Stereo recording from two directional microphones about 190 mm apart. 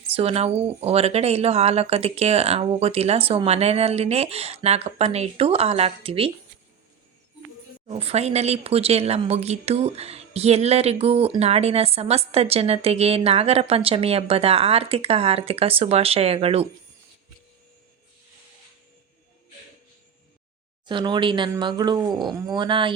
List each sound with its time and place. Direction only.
0.1 s speech: 30° right (ahead or behind)
7.9 s speech: 30° right (ahead or behind)
20.8 s speech: 25° right (ahead or behind)